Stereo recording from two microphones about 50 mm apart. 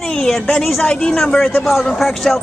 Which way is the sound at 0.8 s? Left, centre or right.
Centre.